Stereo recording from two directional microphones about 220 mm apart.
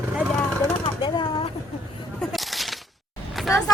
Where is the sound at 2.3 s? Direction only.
Centre (ahead or behind).